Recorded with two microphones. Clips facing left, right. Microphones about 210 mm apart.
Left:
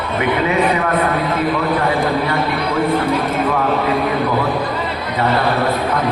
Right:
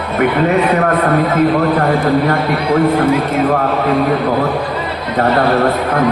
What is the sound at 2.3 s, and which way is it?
Speech, 50° right (ahead or behind).